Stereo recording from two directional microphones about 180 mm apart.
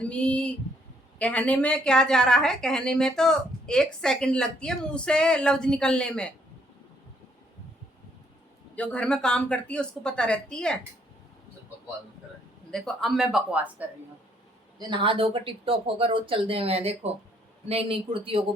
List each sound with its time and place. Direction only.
0.0 s a sound: 5° left (ahead or behind)
1.2 s a woman's voice: 5° left (ahead or behind)
8.7 s a woman's voice: 5° left (ahead or behind)
12.7 s a woman's voice: centre (ahead or behind)
14.8 s speech: 25° right (ahead or behind)